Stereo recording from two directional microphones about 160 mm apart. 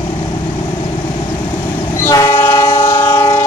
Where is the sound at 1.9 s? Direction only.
20° left (ahead or behind).